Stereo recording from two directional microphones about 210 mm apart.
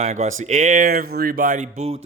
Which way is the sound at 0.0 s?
30° right (ahead or behind).